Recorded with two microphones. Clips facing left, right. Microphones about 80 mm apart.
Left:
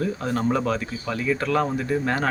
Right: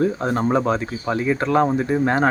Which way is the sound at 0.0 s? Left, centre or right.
Right.